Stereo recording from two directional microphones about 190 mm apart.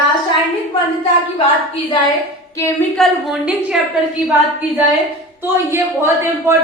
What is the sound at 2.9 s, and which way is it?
Speech, centre (ahead or behind).